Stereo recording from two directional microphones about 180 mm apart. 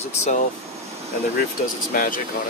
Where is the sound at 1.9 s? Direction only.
50° left (ahead or behind).